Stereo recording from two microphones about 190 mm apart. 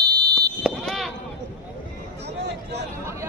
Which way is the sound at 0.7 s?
Centre (ahead or behind).